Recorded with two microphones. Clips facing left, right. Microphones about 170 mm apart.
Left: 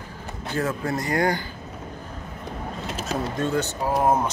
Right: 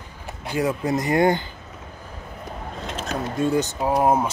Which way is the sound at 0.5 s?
15° right (ahead or behind).